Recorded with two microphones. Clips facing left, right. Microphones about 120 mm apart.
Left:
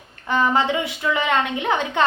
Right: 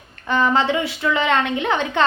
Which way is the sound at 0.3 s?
15° left (ahead or behind).